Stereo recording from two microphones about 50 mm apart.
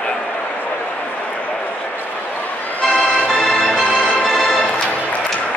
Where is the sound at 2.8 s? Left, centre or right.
Left.